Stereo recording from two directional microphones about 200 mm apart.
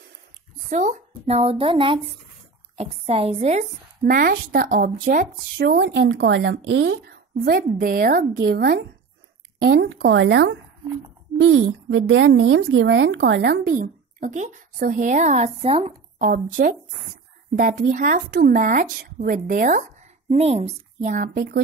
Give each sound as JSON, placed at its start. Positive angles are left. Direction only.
{"t": 0.7, "sound": "speech", "side_deg": -35}
{"t": 5.7, "sound": "speech", "side_deg": -65}
{"t": 7.1, "sound": "speech", "side_deg": -50}
{"t": 11.4, "sound": "speech", "side_deg": -90}
{"t": 16.2, "sound": "speech", "side_deg": -45}